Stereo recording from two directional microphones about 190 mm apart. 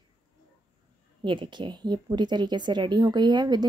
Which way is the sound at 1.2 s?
25° right (ahead or behind).